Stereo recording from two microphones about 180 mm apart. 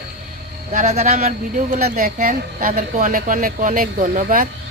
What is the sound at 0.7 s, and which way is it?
A woman's voice, 40° right (ahead or behind).